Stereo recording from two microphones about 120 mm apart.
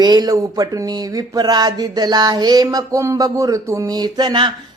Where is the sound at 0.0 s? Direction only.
35° right (ahead or behind).